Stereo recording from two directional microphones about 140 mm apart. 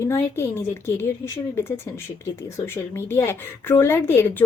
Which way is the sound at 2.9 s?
15° left (ahead or behind).